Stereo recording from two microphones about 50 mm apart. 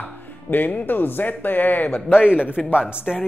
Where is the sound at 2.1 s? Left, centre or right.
Centre.